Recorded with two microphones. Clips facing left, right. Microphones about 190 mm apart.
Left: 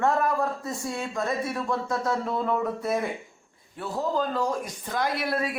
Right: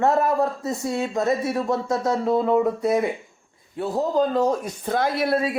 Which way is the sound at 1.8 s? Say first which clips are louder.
Right 6 dB; 20° right (ahead or behind).